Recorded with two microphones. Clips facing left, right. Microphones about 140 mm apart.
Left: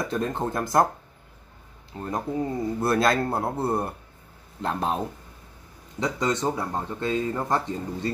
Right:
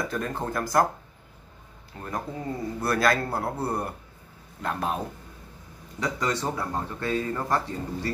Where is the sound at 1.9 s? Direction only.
25° left (ahead or behind).